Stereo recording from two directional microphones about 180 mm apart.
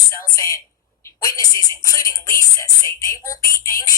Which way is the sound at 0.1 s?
20° left (ahead or behind).